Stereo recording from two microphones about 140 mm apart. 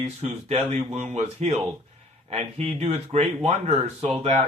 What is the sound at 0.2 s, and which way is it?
Speech, 50° right (ahead or behind).